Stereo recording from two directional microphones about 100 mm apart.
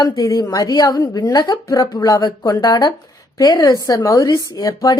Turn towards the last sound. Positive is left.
turn(degrees=35)  # may be behind; listen again after turning